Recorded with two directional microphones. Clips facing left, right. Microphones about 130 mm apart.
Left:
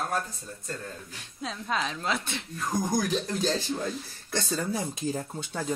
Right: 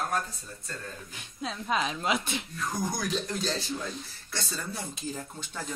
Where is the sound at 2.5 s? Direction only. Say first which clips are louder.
Left 6 dB; 45° left (ahead or behind).